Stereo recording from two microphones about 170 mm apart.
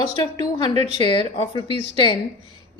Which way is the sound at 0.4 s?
25° left (ahead or behind).